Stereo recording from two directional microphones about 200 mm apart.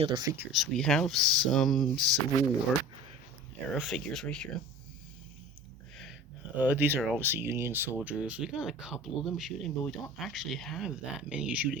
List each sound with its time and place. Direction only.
0.0 s speech: 25° right (ahead or behind)
0.3 s speech: centre (ahead or behind)
3.7 s speech: centre (ahead or behind)
6.6 s speech: 10° right (ahead or behind)